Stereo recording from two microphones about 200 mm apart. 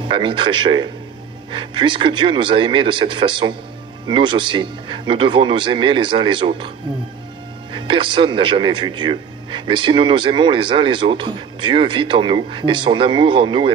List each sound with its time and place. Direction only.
0.1 s speech: 25° right (ahead or behind)
7.7 s speech: 25° right (ahead or behind)